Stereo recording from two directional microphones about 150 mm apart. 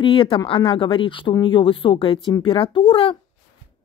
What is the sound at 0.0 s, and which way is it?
Speech, 35° left (ahead or behind).